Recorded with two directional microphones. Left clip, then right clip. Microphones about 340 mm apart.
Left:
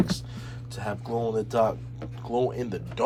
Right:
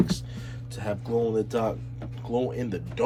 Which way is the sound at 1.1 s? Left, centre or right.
Centre.